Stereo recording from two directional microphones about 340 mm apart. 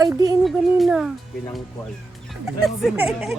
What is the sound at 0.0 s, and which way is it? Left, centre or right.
Speech, centre.